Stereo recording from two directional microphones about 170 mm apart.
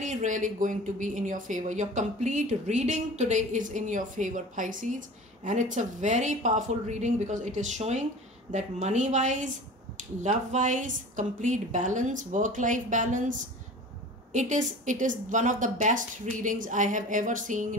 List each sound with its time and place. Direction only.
0.0 s speech: 45° right (ahead or behind)